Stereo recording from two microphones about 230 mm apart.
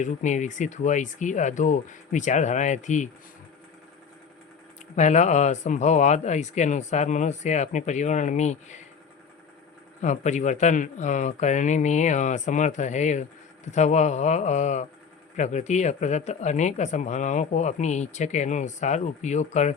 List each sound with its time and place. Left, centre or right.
0.0 s speech: left
4.9 s speech: left
10.0 s speech: left